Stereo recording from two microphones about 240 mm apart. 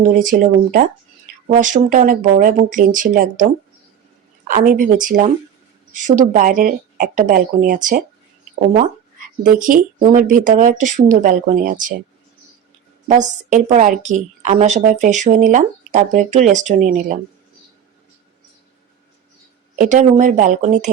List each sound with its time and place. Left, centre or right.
0.0 s speech: right
4.4 s speech: right
9.6 s speech: right
13.1 s speech: right
19.7 s speech: right